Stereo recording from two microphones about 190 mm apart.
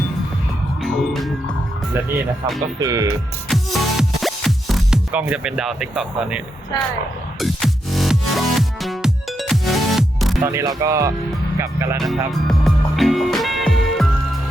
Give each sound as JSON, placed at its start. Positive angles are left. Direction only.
{"t": 0.8, "sound": "music", "side_deg": 0}
{"t": 2.8, "sound": "speech", "side_deg": -15}
{"t": 3.5, "sound": "music", "side_deg": 0}
{"t": 10.4, "sound": "speech", "side_deg": -15}
{"t": 11.9, "sound": "music", "side_deg": 0}